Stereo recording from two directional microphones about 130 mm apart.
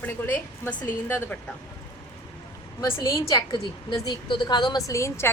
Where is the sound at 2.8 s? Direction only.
25° left (ahead or behind).